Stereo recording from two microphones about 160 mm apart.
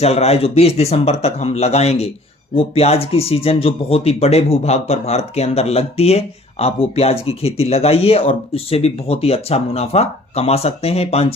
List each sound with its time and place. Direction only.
0.0 s speech: 40° left (ahead or behind)